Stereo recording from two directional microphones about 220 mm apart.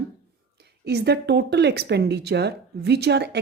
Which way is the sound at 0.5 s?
50° right (ahead or behind).